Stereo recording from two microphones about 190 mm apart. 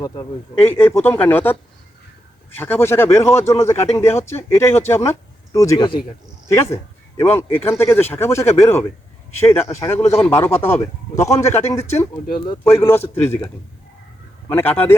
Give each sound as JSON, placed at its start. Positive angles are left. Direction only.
{"t": 0.0, "sound": "a man's voice", "side_deg": 15}
{"t": 2.6, "sound": "a man's voice", "side_deg": 10}
{"t": 14.5, "sound": "a man's voice", "side_deg": 10}